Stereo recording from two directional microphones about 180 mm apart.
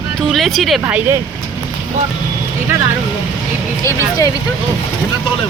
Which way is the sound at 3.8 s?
15° left (ahead or behind).